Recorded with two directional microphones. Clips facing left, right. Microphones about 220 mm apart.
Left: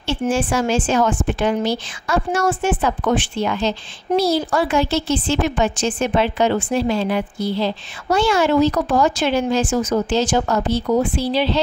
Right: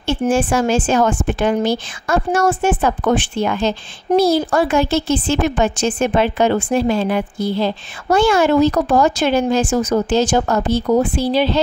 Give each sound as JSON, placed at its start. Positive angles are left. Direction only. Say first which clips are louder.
{"t": 0.0, "sound": "a woman's voice", "louder": "right 3 dB", "side_deg": -50}